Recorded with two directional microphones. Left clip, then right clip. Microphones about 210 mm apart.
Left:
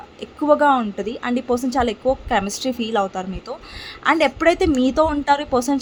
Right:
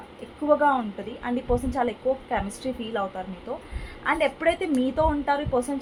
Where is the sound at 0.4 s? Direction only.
60° left (ahead or behind).